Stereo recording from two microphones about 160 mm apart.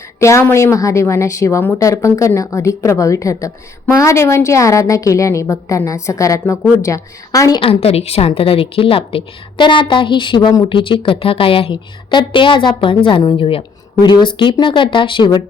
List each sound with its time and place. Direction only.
0.2 s a woman's voice: 15° left (ahead or behind)
7.6 s a woman's voice: 40° left (ahead or behind)